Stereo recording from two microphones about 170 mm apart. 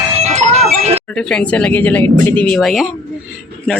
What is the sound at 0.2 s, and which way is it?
Music, 40° right (ahead or behind).